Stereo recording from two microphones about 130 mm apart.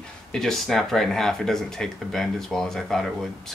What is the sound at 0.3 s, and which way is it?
Speech, 5° left (ahead or behind).